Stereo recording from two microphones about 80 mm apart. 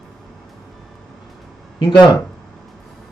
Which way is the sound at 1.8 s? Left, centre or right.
Left.